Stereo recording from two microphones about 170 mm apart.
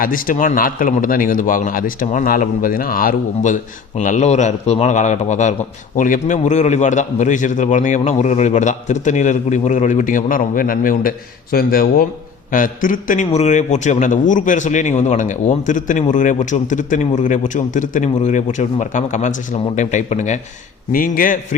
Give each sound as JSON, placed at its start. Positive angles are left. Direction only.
{"t": 0.0, "sound": "a man's voice", "side_deg": 55}
{"t": 20.9, "sound": "speech", "side_deg": 55}